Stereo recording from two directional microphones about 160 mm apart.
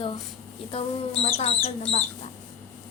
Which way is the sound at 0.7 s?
40° left (ahead or behind).